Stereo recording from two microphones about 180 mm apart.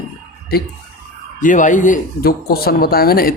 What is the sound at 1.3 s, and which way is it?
Speech, 45° left (ahead or behind).